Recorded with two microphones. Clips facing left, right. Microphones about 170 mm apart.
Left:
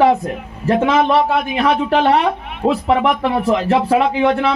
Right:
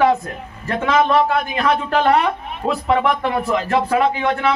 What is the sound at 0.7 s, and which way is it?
A man's voice, 30° left (ahead or behind).